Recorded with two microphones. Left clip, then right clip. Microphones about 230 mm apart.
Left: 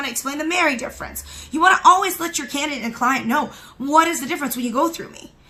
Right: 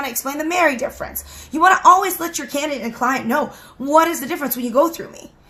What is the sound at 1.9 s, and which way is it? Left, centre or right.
Speech, left.